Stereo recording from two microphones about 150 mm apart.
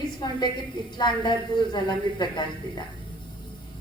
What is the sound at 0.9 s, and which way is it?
A woman's voice, 30° left (ahead or behind).